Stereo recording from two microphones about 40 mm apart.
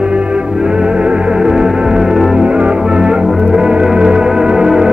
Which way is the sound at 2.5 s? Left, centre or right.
Right.